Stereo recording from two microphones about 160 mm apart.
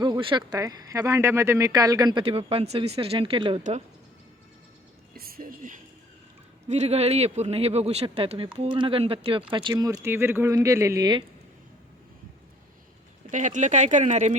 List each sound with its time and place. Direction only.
0.0 s speech: 30° right (ahead or behind)
3.6 s speech: 45° right (ahead or behind)
5.1 s a sound: 70° right (ahead or behind)
6.7 s speech: 40° right (ahead or behind); by 11.2 s 25° right (ahead or behind)
13.3 s speech: 50° right (ahead or behind)